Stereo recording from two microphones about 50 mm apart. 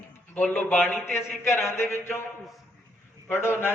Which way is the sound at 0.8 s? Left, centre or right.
Left.